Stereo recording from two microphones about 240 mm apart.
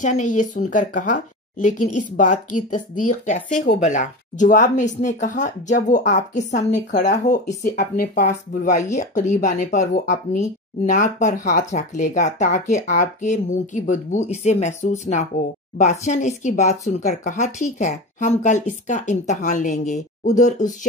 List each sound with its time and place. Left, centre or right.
0.0 s speech: left